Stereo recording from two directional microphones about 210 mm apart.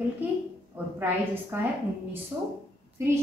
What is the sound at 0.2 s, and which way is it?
A woman's voice, 10° right (ahead or behind).